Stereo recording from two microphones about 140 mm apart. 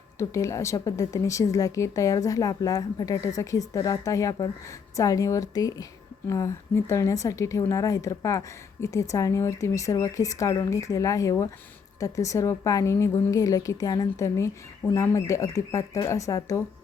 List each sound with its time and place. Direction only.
0.2 s a woman's voice: 20° left (ahead or behind)